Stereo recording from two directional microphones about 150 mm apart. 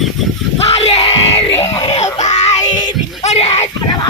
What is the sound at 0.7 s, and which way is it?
Yell, 45° left (ahead or behind).